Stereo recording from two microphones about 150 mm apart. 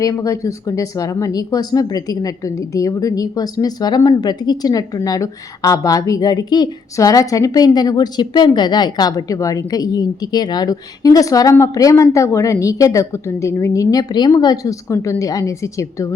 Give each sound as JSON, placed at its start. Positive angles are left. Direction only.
{"t": 0.0, "sound": "speech", "side_deg": 25}